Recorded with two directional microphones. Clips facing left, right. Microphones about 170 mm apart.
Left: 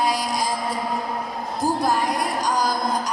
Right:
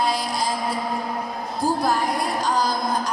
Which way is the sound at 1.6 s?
15° right (ahead or behind).